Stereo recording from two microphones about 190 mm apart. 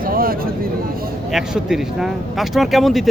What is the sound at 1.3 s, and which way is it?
Speech, centre (ahead or behind).